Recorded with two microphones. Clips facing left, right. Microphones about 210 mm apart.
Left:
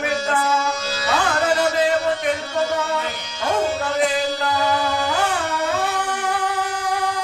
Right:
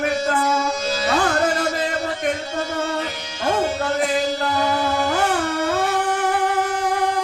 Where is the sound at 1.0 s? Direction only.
50° right (ahead or behind).